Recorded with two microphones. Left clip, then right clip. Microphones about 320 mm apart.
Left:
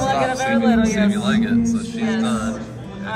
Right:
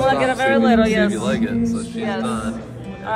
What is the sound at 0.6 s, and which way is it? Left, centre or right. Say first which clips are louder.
Speech: right 3 dB; right.